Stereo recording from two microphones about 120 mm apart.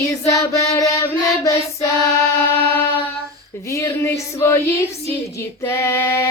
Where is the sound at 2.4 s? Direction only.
20° left (ahead or behind).